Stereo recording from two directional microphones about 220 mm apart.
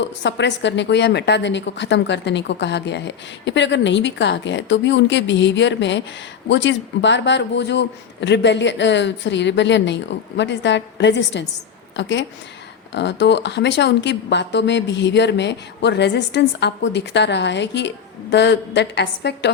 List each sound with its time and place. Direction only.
0.0 s a woman's voice: 50° left (ahead or behind)